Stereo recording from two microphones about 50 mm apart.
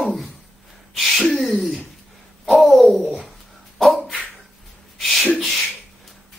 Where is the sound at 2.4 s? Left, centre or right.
Centre.